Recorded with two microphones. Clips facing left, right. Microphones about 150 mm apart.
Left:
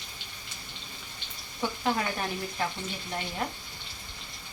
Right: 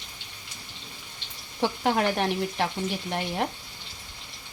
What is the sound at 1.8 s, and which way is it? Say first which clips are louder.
Speech: right 5 dB; 70° right (ahead or behind).